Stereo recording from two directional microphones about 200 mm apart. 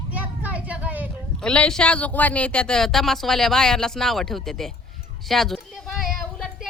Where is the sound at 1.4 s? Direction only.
5° left (ahead or behind).